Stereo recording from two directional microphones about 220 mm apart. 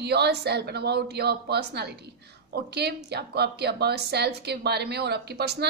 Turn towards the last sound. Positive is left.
turn(degrees=-50)  # may be behind; listen again after turning